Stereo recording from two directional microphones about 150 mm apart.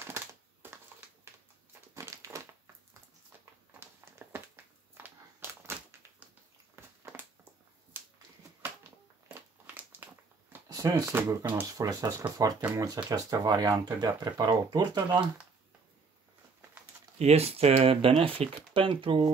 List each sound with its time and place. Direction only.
0.0 s a sound: 15° right (ahead or behind)
2.0 s crushing: 20° right (ahead or behind)
3.8 s a sound: 15° right (ahead or behind)
7.9 s finger snapping: 15° right (ahead or behind)
9.3 s crumpling: 15° right (ahead or behind)
10.5 s speech: 20° right (ahead or behind)
17.2 s speech: 45° right (ahead or behind)